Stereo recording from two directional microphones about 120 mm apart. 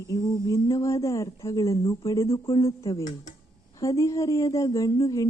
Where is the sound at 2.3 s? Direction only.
50° left (ahead or behind).